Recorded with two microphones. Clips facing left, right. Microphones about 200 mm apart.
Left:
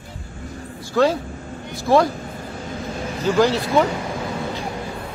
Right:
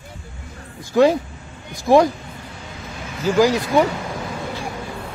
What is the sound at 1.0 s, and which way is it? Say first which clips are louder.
Speech: right 3 dB; 15° right (ahead or behind).